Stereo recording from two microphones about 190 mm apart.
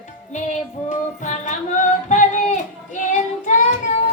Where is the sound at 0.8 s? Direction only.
40° left (ahead or behind).